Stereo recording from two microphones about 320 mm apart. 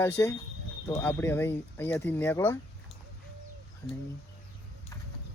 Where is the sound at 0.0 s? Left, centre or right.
Centre.